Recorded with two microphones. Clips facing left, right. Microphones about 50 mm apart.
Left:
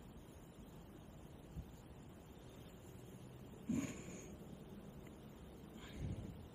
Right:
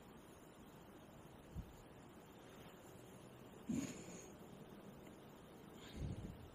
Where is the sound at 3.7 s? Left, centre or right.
Left.